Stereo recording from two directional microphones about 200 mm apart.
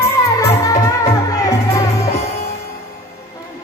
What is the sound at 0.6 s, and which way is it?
Music, 15° left (ahead or behind).